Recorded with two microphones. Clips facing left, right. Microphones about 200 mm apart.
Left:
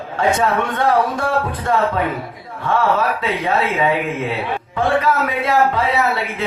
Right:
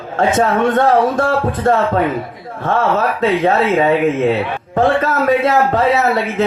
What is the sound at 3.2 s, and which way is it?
Speech, 45° right (ahead or behind).